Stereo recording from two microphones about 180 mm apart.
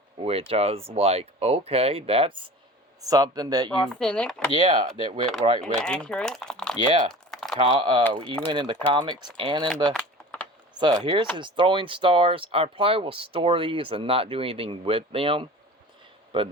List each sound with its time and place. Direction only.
0.2 s speech: 30° right (ahead or behind)
3.0 s speech: 20° right (ahead or behind)
3.7 s speech: 5° left (ahead or behind)
4.5 s speech: 25° right (ahead or behind)
5.8 s speech: 5° left (ahead or behind)
7.1 s a sound: centre (ahead or behind)
7.5 s speech: 30° right (ahead or behind)
9.9 s typing: 5° left (ahead or behind)
10.8 s speech: 25° right (ahead or behind)